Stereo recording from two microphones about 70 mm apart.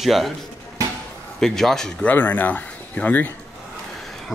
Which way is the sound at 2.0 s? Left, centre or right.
Left.